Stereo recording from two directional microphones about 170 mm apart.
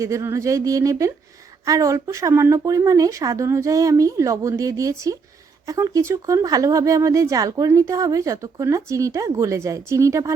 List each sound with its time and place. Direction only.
0.0 s speech: 15° right (ahead or behind)